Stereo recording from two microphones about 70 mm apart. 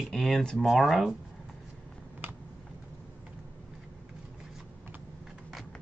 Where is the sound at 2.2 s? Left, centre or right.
Right.